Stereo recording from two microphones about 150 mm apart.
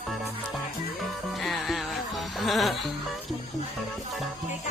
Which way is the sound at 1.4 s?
Centre (ahead or behind).